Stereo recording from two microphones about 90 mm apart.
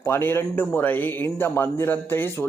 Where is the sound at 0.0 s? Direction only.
25° left (ahead or behind).